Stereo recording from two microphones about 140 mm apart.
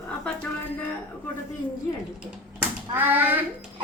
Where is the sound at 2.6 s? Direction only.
15° right (ahead or behind).